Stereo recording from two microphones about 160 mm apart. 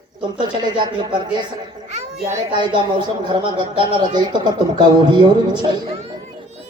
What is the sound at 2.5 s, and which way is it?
Speech, 30° right (ahead or behind).